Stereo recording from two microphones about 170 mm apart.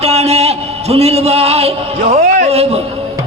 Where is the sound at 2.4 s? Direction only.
35° right (ahead or behind).